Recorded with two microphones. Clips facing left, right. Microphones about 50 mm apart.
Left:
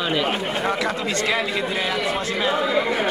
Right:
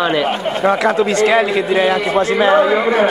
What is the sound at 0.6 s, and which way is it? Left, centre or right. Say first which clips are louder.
Speech: right 13 dB; right.